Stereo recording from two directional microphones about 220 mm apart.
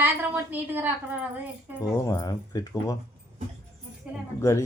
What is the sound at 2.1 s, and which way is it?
Speech, 15° left (ahead or behind).